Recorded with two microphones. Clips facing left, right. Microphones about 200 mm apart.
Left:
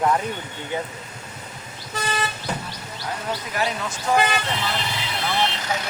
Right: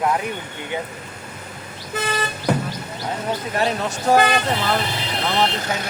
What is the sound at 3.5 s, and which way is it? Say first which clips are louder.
Speech: right 4 dB; 35° right (ahead or behind).